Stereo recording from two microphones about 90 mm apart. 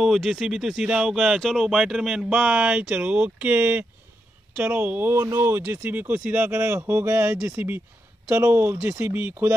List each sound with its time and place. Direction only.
0.0 s speech: 5° right (ahead or behind); by 9.6 s 25° right (ahead or behind)